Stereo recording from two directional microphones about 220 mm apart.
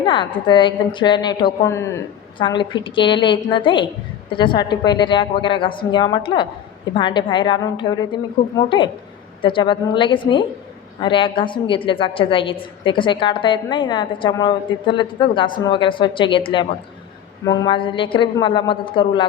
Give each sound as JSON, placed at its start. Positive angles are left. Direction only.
{"t": 0.0, "sound": "a woman's voice", "side_deg": 20}